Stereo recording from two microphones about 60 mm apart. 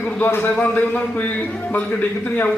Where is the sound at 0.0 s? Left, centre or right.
Left.